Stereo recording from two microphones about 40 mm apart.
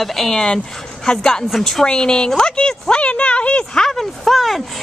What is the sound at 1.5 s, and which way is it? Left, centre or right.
Speech, centre.